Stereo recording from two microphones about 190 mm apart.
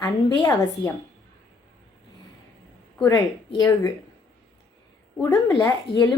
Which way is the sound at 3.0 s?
20° left (ahead or behind).